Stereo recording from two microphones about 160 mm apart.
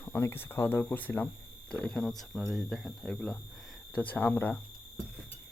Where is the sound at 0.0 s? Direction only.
15° left (ahead or behind).